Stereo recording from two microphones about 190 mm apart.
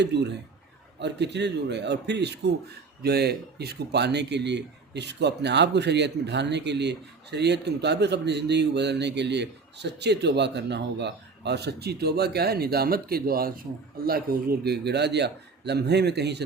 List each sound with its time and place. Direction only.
0.0 s speech: 65° right (ahead or behind)